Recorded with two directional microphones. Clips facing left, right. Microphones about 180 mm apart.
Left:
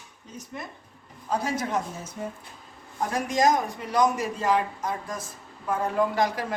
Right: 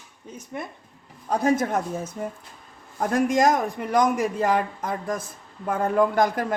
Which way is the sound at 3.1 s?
55° right (ahead or behind).